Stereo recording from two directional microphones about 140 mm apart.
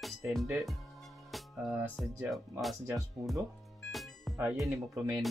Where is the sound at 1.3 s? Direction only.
Centre (ahead or behind).